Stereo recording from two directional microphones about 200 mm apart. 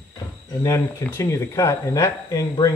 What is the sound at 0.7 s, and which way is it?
Speech, 15° left (ahead or behind).